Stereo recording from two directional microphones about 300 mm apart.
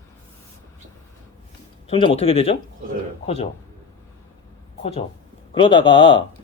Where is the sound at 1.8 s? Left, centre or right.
Centre.